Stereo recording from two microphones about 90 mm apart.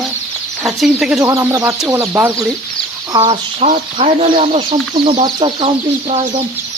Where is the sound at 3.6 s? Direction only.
90° right.